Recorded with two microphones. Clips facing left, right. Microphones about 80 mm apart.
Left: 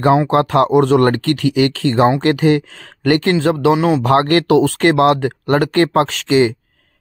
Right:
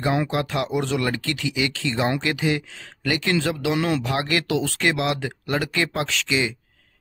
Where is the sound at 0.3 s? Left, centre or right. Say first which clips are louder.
Left 12 dB; left.